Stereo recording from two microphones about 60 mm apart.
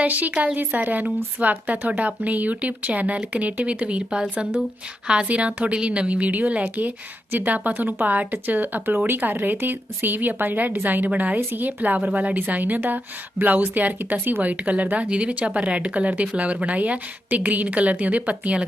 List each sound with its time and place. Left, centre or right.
0.0 s speech: right